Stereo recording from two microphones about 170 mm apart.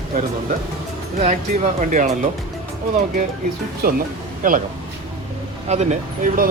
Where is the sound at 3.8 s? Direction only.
60° right (ahead or behind).